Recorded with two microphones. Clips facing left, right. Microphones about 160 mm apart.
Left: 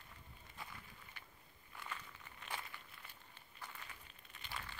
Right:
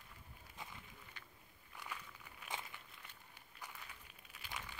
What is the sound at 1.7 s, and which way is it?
Walk, 10° right (ahead or behind).